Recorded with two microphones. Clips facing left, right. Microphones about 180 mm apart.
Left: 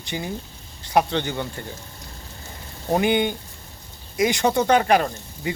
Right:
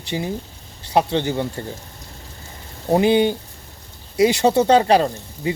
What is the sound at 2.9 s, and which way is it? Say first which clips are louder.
Speech: right 5 dB; 25° right (ahead or behind).